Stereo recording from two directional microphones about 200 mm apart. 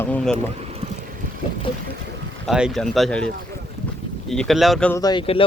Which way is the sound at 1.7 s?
25° left (ahead or behind).